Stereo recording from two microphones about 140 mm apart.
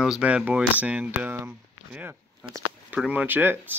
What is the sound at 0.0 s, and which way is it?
Speech, 5° right (ahead or behind).